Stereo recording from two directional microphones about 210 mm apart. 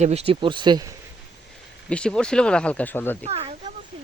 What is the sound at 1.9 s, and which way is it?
Speech, 5° left (ahead or behind).